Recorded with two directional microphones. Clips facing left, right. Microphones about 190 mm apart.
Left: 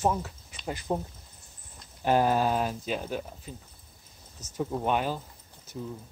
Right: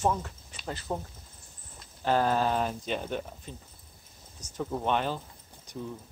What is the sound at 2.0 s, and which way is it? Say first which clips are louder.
Speech: left 2 dB; 10° left (ahead or behind).